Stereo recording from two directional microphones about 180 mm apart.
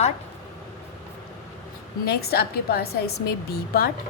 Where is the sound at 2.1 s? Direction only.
60° left (ahead or behind).